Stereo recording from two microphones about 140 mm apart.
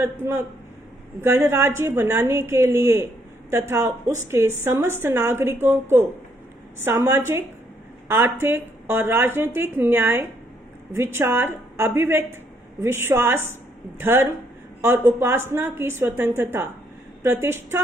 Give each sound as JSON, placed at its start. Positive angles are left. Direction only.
{"t": 1.2, "sound": "a woman's voice", "side_deg": -20}
{"t": 6.8, "sound": "a woman's voice", "side_deg": -20}